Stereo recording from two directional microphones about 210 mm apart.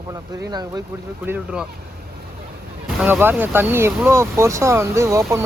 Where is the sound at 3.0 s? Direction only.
10° right (ahead or behind).